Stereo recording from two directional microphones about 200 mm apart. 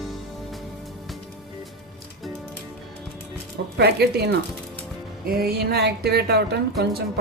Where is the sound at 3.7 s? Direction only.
55° right (ahead or behind).